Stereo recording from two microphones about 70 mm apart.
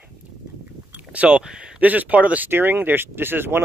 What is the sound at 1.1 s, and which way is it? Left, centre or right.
Speech, centre.